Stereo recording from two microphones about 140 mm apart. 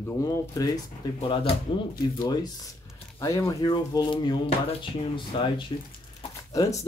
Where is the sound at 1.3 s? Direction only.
45° left (ahead or behind).